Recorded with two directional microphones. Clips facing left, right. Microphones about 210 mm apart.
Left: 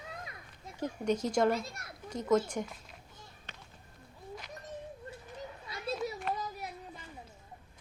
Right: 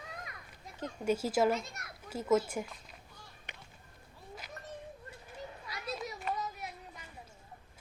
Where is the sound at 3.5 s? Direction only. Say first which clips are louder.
Right 1 dB; 15° right (ahead or behind).